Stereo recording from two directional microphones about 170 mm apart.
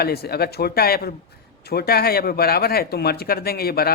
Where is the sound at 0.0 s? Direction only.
65° left (ahead or behind).